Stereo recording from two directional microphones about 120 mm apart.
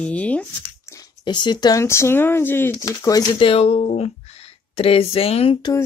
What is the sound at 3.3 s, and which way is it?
Speech, 50° left (ahead or behind).